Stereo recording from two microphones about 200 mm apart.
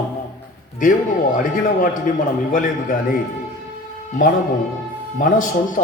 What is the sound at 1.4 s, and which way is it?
A man's voice, 40° left (ahead or behind).